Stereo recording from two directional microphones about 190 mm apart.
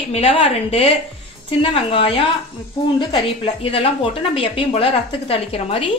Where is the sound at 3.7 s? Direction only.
30° left (ahead or behind).